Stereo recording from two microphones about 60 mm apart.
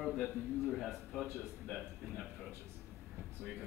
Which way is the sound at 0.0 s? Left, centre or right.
Centre.